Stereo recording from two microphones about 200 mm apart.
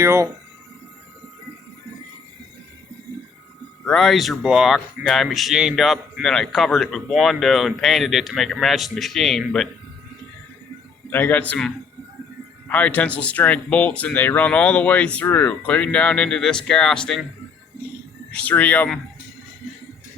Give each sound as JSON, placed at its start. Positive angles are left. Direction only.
{"t": 0.0, "sound": "speech", "side_deg": -15}
{"t": 3.8, "sound": "speech", "side_deg": 0}
{"t": 11.1, "sound": "speech", "side_deg": 10}
{"t": 18.3, "sound": "speech", "side_deg": 5}